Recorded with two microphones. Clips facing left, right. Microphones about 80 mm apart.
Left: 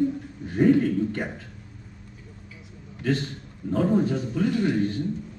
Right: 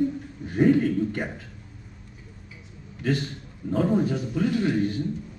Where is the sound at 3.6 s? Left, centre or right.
Centre.